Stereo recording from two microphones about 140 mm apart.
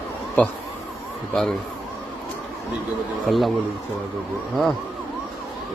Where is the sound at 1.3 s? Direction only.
5° left (ahead or behind).